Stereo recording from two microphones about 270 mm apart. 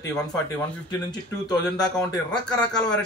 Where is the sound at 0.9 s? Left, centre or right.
Centre.